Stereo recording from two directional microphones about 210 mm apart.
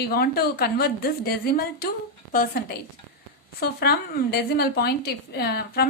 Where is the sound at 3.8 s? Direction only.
50° left (ahead or behind).